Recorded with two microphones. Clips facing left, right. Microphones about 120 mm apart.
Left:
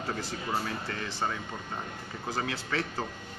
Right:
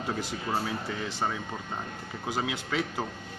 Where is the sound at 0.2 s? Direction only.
15° right (ahead or behind).